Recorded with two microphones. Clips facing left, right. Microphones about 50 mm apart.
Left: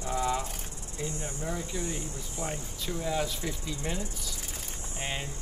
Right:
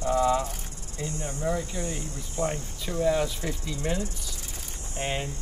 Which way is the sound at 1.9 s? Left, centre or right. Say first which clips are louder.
Right 4 dB; right.